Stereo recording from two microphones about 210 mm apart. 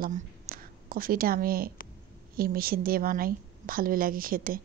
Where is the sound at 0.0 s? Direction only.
45° right (ahead or behind).